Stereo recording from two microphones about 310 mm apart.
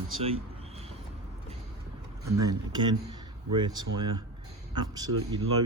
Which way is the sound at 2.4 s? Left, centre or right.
Centre.